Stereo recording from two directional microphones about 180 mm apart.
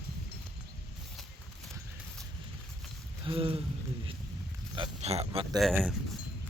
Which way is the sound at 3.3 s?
30° right (ahead or behind).